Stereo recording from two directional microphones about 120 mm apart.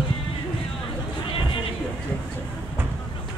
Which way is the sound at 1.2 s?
50° left (ahead or behind).